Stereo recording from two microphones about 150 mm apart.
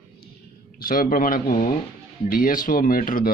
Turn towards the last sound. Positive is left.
turn(degrees=70)  # may be behind; listen again after turning